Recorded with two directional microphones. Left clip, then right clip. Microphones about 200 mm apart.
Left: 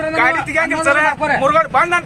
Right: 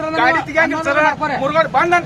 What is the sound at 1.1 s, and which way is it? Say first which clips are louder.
Speech: left 2 dB; 5° left (ahead or behind).